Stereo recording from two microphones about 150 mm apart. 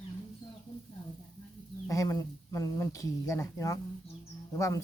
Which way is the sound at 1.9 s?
20° left (ahead or behind).